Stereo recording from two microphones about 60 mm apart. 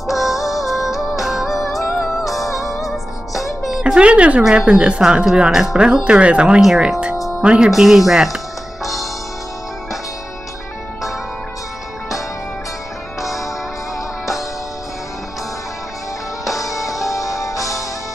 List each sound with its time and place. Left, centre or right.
0.0 s music: centre
3.8 s speech: centre
7.7 s speech: centre
13.2 s music: centre
16.4 s music: centre
17.0 s music: left